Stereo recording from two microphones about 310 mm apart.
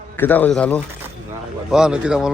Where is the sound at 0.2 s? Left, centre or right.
Centre.